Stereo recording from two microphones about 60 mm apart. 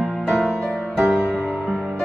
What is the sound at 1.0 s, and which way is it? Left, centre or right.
Music, right.